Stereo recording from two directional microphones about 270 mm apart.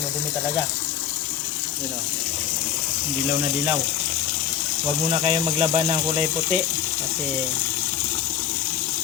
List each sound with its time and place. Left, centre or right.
5.2 s speech: right